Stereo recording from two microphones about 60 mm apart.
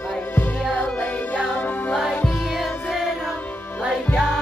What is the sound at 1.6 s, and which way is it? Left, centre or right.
Music, left.